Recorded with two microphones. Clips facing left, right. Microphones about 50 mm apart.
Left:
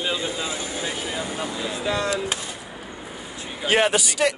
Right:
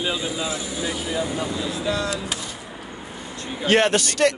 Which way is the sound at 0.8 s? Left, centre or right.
Centre.